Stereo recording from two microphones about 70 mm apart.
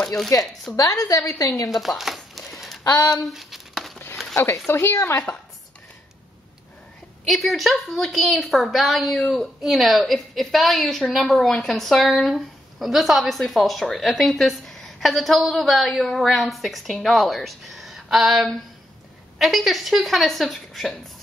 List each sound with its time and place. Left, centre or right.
0.7 s a woman's voice: left
1.7 s crumpling: centre
3.3 s a sound: centre
4.6 s a woman's voice: left
7.2 s speech: centre